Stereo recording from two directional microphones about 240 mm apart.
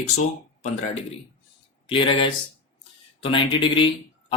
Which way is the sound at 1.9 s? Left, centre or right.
Left.